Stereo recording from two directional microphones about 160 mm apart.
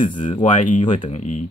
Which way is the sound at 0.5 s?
50° left (ahead or behind).